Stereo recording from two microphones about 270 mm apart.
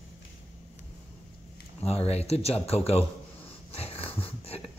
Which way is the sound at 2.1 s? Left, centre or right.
Left.